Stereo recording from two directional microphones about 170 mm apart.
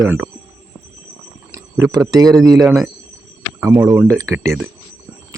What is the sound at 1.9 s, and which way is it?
A man's voice, 20° right (ahead or behind).